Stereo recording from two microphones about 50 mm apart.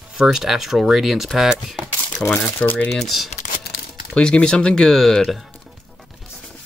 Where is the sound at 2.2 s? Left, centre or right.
Left.